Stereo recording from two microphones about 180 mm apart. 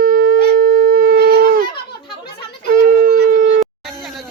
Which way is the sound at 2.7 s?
50° right (ahead or behind).